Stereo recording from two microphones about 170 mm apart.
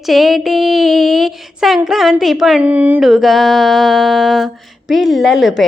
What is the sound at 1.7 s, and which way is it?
A woman's voice, centre (ahead or behind).